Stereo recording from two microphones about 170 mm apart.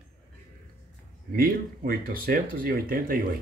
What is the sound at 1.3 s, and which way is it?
Speech, 60° right (ahead or behind).